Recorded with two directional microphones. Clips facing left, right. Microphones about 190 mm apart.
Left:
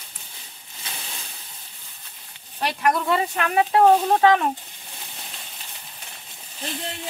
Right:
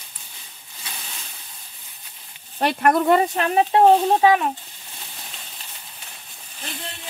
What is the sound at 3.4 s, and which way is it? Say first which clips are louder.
Speech: right 2 dB; 30° right (ahead or behind).